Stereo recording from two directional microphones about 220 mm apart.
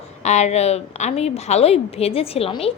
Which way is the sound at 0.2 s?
30° left (ahead or behind).